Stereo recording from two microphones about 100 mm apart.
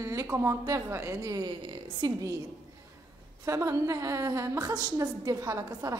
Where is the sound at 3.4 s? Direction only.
30° right (ahead or behind).